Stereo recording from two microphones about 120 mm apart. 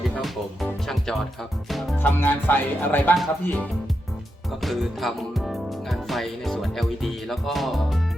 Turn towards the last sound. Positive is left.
turn(degrees=0)  # may be behind; listen again after turning